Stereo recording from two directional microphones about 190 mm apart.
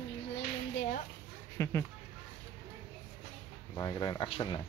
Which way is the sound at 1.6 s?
15° left (ahead or behind).